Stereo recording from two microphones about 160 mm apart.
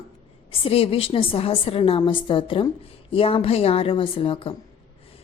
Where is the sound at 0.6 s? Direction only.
35° left (ahead or behind).